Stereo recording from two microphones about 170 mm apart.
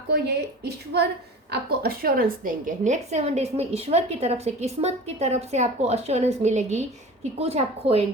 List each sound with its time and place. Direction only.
0.1 s a woman's voice: 75° right (ahead or behind)
2.4 s a woman's voice: 50° right (ahead or behind)